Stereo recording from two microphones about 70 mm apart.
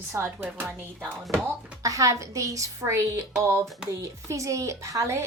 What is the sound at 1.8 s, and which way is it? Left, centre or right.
A woman's voice, right.